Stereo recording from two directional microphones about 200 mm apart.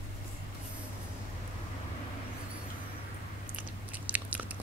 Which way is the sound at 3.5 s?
10° right (ahead or behind).